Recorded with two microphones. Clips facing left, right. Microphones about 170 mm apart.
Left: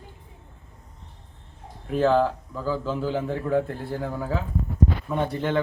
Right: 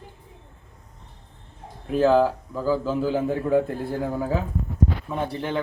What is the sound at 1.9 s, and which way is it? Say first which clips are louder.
A man's voice: right 2 dB; 10° right (ahead or behind).